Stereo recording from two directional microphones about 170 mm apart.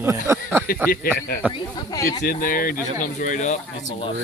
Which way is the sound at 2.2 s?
55° left (ahead or behind).